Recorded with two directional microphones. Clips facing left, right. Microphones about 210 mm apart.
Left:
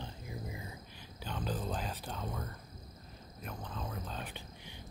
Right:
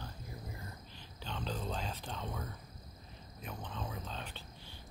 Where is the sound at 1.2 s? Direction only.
10° left (ahead or behind).